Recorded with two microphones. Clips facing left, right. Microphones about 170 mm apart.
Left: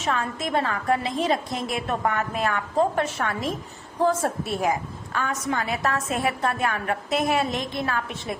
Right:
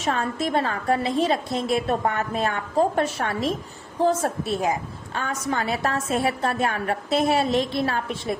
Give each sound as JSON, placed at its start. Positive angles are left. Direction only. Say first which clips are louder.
{"t": 0.0, "sound": "a woman's voice", "louder": "right 2 dB", "side_deg": -35}